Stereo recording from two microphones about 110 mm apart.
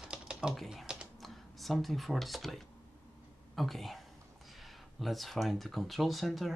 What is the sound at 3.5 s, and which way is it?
Speech, centre (ahead or behind).